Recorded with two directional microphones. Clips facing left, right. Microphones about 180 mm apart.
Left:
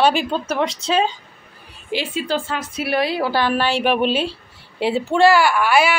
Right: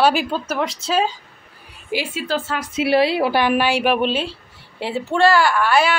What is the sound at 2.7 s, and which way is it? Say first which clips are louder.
A woman's voice: right 4 dB; 25° right (ahead or behind).